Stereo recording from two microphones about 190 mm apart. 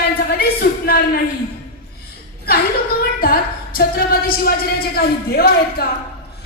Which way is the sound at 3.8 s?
50° left (ahead or behind).